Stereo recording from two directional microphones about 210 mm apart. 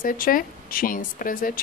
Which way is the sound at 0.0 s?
40° left (ahead or behind).